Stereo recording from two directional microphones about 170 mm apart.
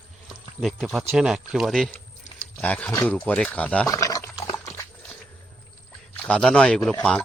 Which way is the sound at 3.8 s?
20° left (ahead or behind).